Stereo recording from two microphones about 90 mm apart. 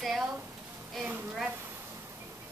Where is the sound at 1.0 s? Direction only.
10° right (ahead or behind).